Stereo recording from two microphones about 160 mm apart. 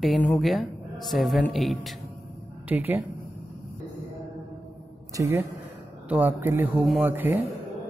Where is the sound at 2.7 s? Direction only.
10° right (ahead or behind).